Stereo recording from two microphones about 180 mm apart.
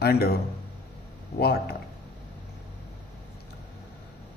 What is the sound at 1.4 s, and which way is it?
Speech, 60° left (ahead or behind).